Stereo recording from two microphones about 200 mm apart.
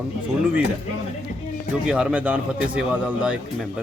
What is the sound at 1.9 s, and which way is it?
A man's voice, 5° right (ahead or behind).